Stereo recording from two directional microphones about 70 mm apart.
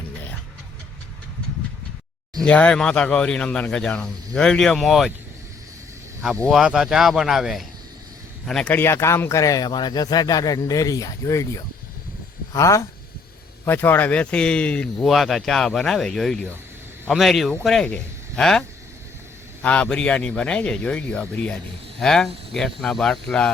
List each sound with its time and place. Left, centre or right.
2.4 s speech: centre
6.5 s speech: centre
8.4 s speech: centre
8.8 s speech: left
9.4 s speech: left
9.6 s speech: left
13.7 s speech: left
14.2 s speech: centre
15.0 s speech: centre
19.6 s speech: centre
21.5 s speech: centre